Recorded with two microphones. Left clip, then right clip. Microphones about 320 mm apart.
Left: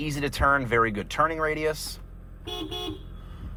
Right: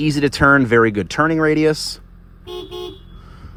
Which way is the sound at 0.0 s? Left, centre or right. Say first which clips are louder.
Right 10 dB; right.